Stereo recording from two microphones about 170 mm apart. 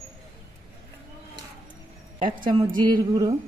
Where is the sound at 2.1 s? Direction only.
30° right (ahead or behind).